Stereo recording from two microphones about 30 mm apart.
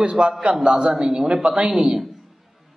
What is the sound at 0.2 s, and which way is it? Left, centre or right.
A woman's voice, right.